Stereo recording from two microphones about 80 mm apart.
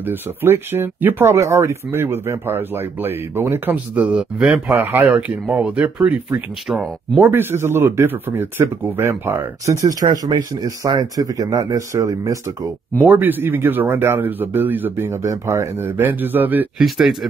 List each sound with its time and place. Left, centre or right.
0.0 s speech: right
4.7 s speech: right
7.2 s speech: right
9.7 s speech: right
13.0 s speech: right
16.7 s speech: centre